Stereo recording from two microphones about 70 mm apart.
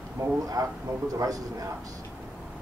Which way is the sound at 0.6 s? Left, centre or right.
Right.